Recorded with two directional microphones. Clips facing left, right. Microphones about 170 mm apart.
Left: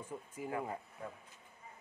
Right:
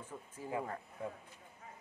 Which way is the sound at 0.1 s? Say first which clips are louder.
Left 3 dB; 15° left (ahead or behind).